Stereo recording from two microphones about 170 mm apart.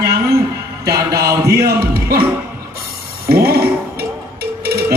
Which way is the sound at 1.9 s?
65° right (ahead or behind).